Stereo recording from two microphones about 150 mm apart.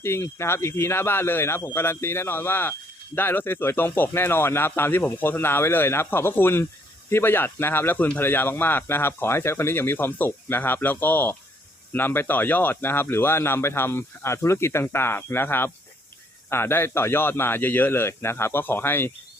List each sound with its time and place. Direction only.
0.0 s speech: 15° left (ahead or behind)